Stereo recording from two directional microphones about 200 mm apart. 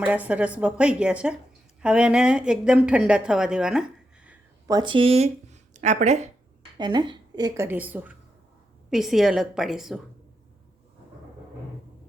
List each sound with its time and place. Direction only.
0.0 s speech: 10° right (ahead or behind)
4.7 s speech: 25° right (ahead or behind)
6.7 s a woman's voice: 20° right (ahead or behind); by 10.0 s centre (ahead or behind)